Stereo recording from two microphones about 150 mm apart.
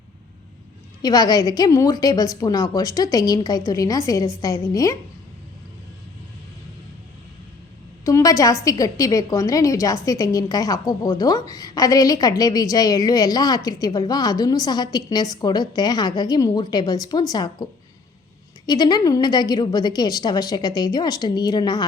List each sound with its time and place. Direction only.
1.0 s a woman's voice: 25° left (ahead or behind)
8.0 s a woman's voice: 20° left (ahead or behind)